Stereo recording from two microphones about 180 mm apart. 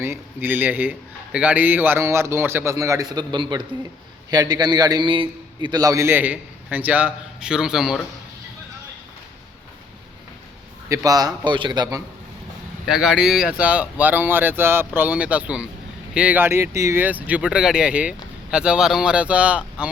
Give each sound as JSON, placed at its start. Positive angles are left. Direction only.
{"t": 0.0, "sound": "a man's voice", "side_deg": -10}
{"t": 10.8, "sound": "a man's voice", "side_deg": -20}
{"t": 12.8, "sound": "a man's voice", "side_deg": 0}